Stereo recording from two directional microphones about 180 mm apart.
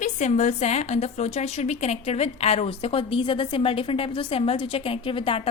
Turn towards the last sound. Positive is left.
turn(degrees=30)  # may be behind; listen again after turning